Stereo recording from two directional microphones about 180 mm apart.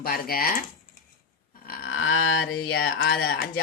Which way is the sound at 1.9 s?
90° left.